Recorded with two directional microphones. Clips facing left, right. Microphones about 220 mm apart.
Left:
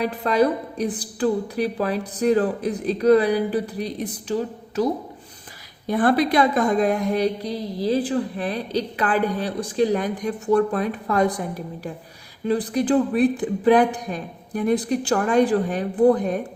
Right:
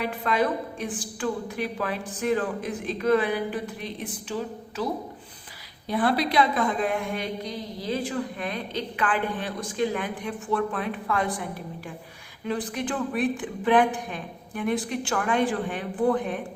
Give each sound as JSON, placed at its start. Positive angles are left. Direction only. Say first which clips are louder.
{"t": 0.0, "sound": "a woman's voice", "louder": "left 6 dB", "side_deg": 40}
{"t": 5.9, "sound": "a woman's voice", "louder": "left 5 dB", "side_deg": 50}